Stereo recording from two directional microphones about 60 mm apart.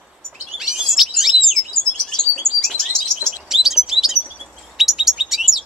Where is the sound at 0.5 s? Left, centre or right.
Centre.